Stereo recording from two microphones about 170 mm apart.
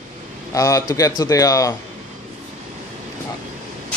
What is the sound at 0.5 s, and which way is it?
A man's voice, 20° left (ahead or behind).